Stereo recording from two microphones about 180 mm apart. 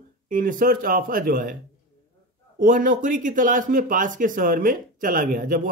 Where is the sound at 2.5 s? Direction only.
50° right (ahead or behind).